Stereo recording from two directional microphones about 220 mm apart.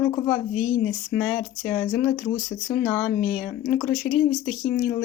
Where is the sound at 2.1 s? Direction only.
35° left (ahead or behind).